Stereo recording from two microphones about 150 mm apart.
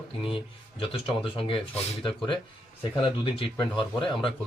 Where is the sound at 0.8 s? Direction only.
35° left (ahead or behind).